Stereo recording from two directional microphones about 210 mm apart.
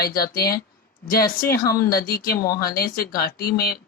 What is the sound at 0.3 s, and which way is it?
Speech, 45° left (ahead or behind).